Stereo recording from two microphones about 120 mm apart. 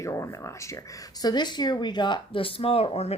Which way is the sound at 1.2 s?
35° left (ahead or behind).